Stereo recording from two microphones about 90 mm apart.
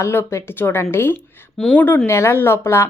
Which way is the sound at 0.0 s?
30° left (ahead or behind).